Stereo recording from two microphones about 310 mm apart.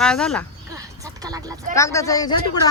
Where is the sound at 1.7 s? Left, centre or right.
Centre.